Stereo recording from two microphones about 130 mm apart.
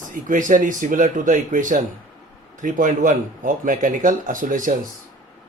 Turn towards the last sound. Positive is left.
turn(degrees=-90)